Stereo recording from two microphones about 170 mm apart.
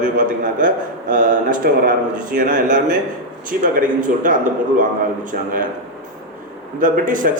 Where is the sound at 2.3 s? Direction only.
50° right (ahead or behind).